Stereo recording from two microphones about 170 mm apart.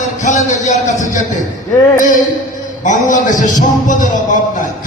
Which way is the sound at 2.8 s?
50° left (ahead or behind).